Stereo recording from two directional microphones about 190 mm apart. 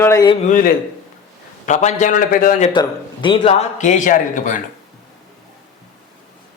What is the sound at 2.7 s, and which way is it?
A man's voice, 25° left (ahead or behind).